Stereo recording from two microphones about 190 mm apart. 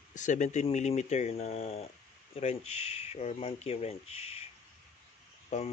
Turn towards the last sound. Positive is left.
turn(degrees=40)  # may be behind; listen again after turning